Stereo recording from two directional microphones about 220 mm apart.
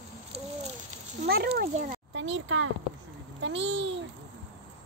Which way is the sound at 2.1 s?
55° right (ahead or behind).